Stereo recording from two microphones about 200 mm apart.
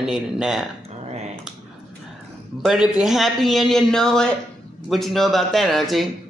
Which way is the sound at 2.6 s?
5° right (ahead or behind).